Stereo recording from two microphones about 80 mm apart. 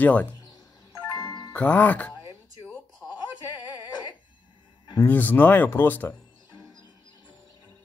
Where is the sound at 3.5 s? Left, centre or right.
Left.